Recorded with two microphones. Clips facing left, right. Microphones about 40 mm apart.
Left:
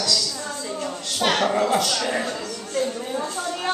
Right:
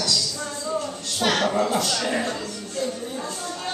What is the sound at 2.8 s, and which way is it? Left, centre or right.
Speech, left.